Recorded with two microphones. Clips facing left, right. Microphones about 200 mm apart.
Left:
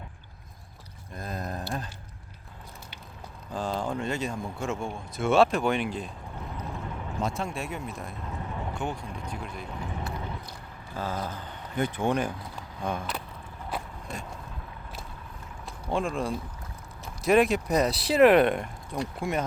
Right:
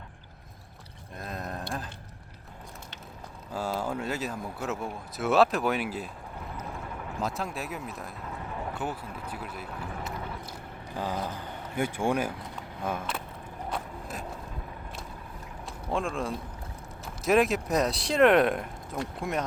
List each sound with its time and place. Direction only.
1.1 s a sound: centre (ahead or behind)
3.5 s speech: 5° right (ahead or behind)
7.2 s speech: centre (ahead or behind)
10.9 s speech: 15° right (ahead or behind)
13.7 s a sound: centre (ahead or behind)
15.9 s speech: centre (ahead or behind)